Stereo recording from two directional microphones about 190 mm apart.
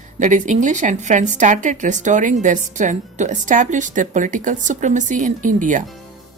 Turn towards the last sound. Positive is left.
turn(degrees=-45)  # may be behind; listen again after turning